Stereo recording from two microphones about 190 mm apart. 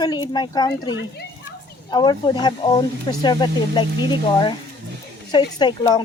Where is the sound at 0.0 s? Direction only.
20° left (ahead or behind).